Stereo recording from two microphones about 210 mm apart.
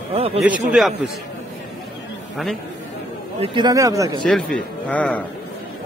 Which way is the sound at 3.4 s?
20° right (ahead or behind).